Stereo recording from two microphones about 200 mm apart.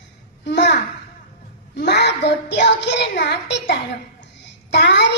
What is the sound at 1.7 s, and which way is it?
A child's voice, 55° left (ahead or behind).